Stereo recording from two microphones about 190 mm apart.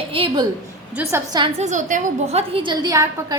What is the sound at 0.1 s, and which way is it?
Speech, 30° right (ahead or behind).